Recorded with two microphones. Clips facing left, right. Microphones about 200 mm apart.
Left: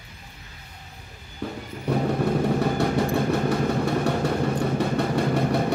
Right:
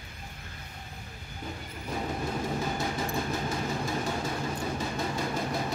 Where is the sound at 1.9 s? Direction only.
65° left (ahead or behind).